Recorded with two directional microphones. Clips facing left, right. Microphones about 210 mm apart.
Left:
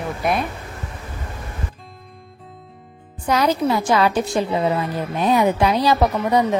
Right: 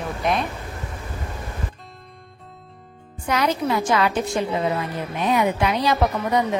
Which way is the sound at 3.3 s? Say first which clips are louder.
Left 3 dB; 35° left (ahead or behind).